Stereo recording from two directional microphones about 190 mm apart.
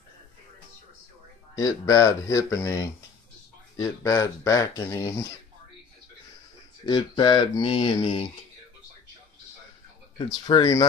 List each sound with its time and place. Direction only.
1.5 s speech: 15° left (ahead or behind)
6.9 s speech: 25° left (ahead or behind)
10.1 s speech: 25° left (ahead or behind)